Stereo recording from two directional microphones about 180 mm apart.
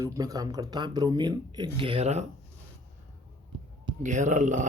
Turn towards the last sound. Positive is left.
turn(degrees=-45)  # may be behind; listen again after turning